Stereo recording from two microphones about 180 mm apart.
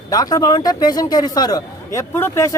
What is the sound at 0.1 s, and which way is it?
A man's voice, 20° left (ahead or behind).